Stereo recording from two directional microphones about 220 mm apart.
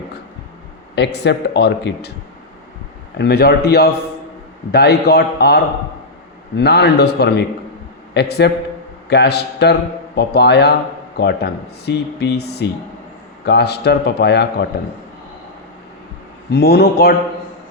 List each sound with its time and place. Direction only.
0.9 s speech: 50° left (ahead or behind)
3.2 s speech: 45° left (ahead or behind)
16.5 s speech: 45° left (ahead or behind)